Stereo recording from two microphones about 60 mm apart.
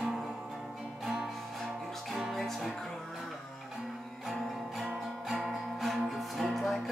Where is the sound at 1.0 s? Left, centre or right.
Centre.